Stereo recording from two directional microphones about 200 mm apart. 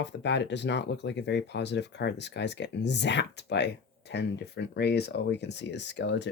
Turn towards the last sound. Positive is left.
turn(degrees=60)  # may be behind; listen again after turning